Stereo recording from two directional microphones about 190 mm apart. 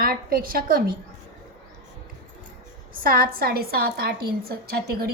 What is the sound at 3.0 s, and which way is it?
A woman's voice, 50° right (ahead or behind).